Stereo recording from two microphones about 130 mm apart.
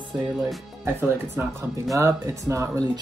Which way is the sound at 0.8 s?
15° right (ahead or behind).